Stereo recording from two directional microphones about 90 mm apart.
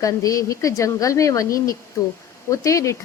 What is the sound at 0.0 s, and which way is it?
Speech, 40° left (ahead or behind).